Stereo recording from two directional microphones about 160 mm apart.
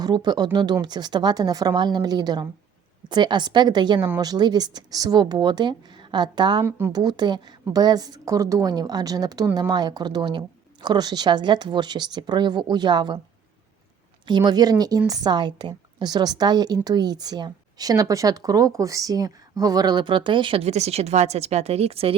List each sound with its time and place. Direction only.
0.0 s a woman's voice: 25° right (ahead or behind)
6.7 s speech: 15° right (ahead or behind)
6.9 s a woman's voice: 25° right (ahead or behind)
14.3 s a woman's voice: 25° right (ahead or behind)